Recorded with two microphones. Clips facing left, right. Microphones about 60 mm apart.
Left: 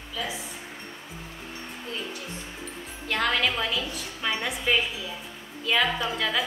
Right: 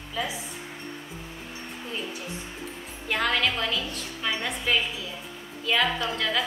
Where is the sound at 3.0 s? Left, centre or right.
Centre.